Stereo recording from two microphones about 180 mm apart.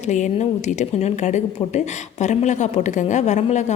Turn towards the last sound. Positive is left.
turn(degrees=40)  # may be behind; listen again after turning